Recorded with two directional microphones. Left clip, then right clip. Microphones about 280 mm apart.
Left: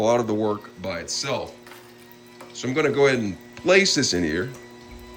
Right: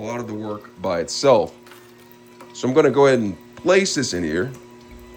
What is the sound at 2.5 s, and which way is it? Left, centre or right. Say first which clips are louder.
A man's voice: right 6 dB; centre.